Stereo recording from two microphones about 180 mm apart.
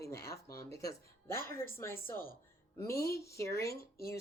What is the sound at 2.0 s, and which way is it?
Speech, 50° left (ahead or behind).